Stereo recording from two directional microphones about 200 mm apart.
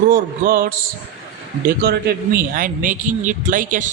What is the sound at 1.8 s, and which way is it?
A man's voice, 50° right (ahead or behind).